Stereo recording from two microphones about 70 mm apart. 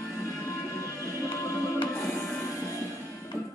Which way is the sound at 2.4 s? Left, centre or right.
Left.